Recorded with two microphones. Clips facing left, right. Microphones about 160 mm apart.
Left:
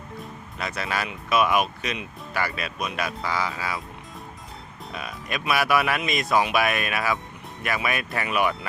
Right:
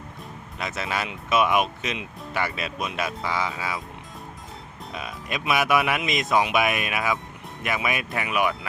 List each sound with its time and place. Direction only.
0.6 s speech: 20° right (ahead or behind)
4.9 s speech: 20° right (ahead or behind)